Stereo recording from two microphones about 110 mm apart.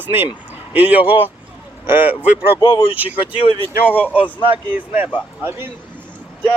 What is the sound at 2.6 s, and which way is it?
Speech, 40° left (ahead or behind).